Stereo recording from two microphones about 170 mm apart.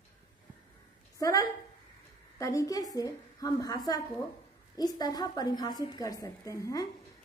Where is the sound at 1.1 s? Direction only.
20° left (ahead or behind).